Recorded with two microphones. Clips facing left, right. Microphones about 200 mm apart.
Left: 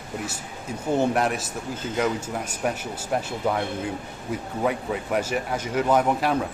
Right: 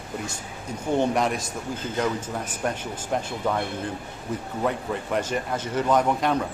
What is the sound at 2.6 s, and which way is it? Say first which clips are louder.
Speech: left 1 dB; 5° left (ahead or behind).